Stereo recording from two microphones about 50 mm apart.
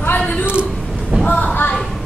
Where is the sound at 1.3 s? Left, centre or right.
Left.